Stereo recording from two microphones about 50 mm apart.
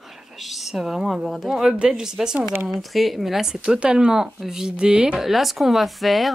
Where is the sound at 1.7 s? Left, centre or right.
Centre.